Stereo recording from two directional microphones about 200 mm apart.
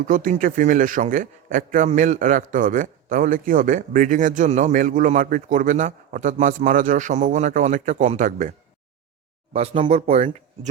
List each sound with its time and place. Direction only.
0.0 s a man's voice: 40° right (ahead or behind)